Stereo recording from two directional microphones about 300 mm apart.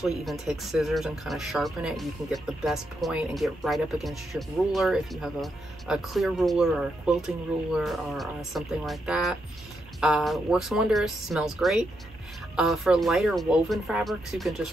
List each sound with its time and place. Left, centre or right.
0.0 s speech: centre
7.8 s speech: centre